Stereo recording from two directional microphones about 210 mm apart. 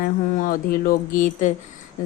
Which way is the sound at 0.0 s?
40° left (ahead or behind).